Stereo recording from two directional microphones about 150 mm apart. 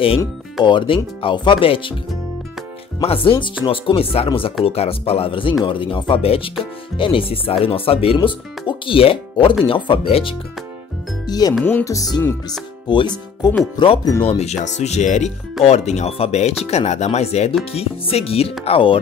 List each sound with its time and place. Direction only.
0.7 s speech: 35° left (ahead or behind)
3.0 s speech: 40° left (ahead or behind)
11.2 s speech: 25° left (ahead or behind)
14.2 s speech: 40° left (ahead or behind)